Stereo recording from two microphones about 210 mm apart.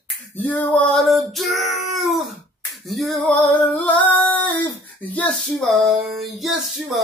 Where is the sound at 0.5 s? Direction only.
5° left (ahead or behind).